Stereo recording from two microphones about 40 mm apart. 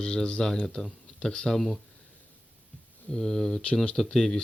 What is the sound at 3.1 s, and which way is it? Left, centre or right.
Speech, centre.